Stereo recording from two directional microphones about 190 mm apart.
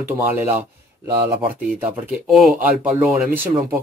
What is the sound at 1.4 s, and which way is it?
Speech, 5° right (ahead or behind).